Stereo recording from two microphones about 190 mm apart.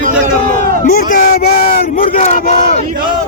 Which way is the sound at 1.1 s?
50° left (ahead or behind).